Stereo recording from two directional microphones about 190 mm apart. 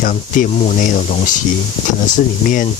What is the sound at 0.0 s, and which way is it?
Speech, 45° left (ahead or behind).